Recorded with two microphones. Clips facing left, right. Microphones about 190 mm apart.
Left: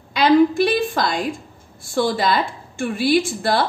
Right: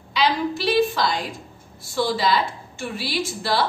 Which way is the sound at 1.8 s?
50° left (ahead or behind).